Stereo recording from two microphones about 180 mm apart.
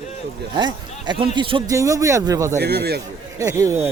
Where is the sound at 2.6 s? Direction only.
65° right (ahead or behind).